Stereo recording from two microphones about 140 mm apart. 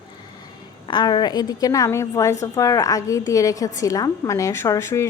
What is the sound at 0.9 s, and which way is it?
A woman's voice, 30° left (ahead or behind).